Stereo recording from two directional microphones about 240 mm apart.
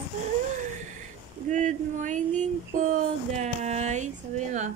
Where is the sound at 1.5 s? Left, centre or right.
Right.